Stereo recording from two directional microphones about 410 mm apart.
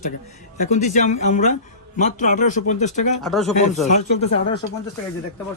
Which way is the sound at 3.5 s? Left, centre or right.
Centre.